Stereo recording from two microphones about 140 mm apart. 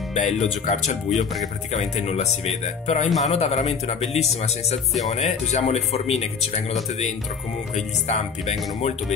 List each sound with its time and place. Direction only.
0.1 s speech: 60° left (ahead or behind)